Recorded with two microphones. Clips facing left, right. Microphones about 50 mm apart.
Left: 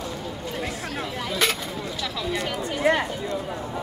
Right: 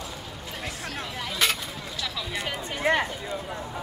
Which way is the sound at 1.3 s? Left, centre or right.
Centre.